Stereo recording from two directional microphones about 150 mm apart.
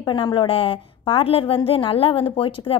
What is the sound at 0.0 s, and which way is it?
A woman's voice, 30° left (ahead or behind).